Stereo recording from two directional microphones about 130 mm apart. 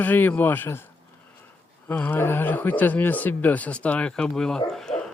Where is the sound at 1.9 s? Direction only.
15° left (ahead or behind).